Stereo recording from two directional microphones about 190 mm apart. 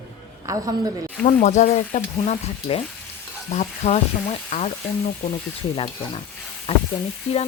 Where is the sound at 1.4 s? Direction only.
40° left (ahead or behind).